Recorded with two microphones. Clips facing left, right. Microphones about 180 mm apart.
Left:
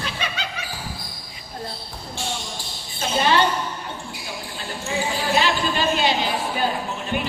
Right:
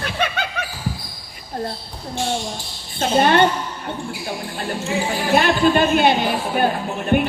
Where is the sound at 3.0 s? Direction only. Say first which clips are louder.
Right 5 dB; 50° right (ahead or behind).